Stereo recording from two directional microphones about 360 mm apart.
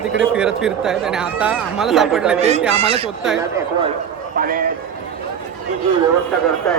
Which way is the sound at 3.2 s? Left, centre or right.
Centre.